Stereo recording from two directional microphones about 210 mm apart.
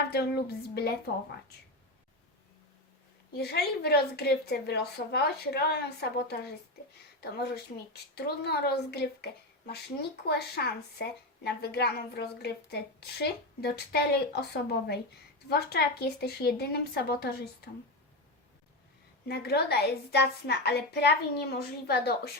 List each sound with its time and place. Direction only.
0.1 s speech: 50° left (ahead or behind)
3.3 s speech: 50° left (ahead or behind)
19.3 s speech: 50° left (ahead or behind)